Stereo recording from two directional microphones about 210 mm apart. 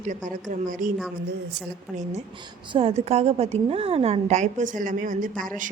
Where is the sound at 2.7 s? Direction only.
30° right (ahead or behind).